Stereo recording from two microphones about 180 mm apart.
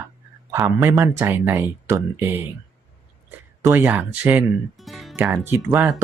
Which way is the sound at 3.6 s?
10° right (ahead or behind).